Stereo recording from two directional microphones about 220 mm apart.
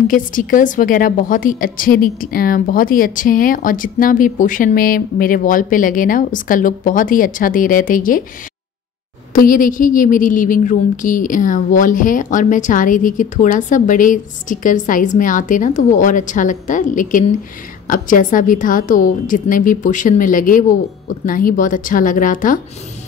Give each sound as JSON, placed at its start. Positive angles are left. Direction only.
{"t": 0.1, "sound": "a woman's voice", "side_deg": 35}
{"t": 9.3, "sound": "a woman's voice", "side_deg": 40}